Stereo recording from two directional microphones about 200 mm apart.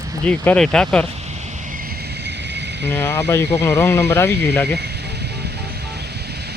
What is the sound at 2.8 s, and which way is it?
Speech, 10° left (ahead or behind).